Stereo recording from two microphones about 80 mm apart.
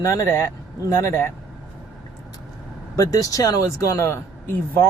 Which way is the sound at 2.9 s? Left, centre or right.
Left.